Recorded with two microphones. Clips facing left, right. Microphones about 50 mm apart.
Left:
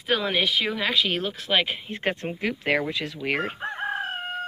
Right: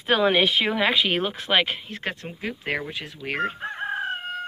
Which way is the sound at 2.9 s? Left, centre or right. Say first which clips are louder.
Left 4 dB; left.